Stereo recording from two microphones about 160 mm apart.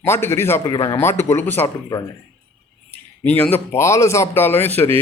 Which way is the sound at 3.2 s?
10° left (ahead or behind).